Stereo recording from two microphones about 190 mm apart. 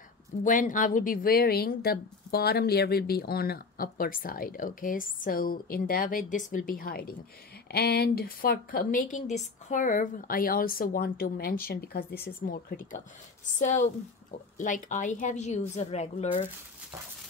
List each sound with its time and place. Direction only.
0.4 s a woman's voice: 45° left (ahead or behind)